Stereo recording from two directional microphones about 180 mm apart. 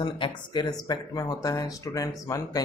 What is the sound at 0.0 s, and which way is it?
Speech, 25° left (ahead or behind).